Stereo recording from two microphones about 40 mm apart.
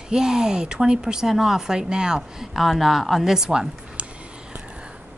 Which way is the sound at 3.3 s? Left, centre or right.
Centre.